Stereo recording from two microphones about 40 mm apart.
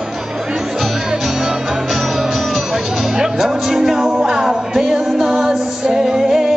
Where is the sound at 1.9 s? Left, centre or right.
Centre.